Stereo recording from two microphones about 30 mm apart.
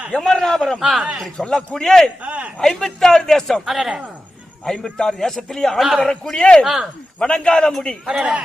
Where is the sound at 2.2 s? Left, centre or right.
Right.